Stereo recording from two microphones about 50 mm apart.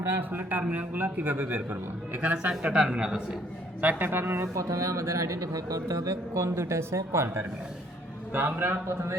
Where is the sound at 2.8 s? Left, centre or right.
Centre.